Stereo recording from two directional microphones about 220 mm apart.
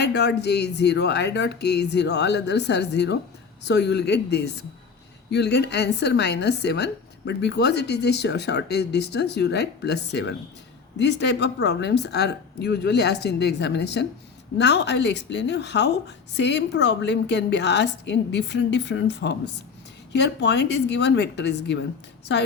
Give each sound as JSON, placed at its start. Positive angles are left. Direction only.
{"t": 0.0, "sound": "a woman's voice", "side_deg": 50}